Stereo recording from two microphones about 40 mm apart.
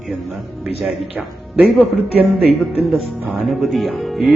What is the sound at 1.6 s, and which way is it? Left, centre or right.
Speech, centre.